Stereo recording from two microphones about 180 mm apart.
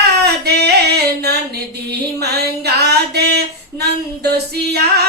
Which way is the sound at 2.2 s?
65° right (ahead or behind).